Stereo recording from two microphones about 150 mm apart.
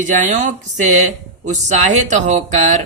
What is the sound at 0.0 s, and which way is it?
Speech, 50° right (ahead or behind).